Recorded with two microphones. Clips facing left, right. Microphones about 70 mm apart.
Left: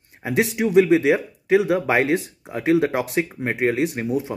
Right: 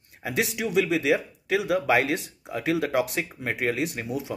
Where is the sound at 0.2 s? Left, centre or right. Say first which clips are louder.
Left 6 dB; left.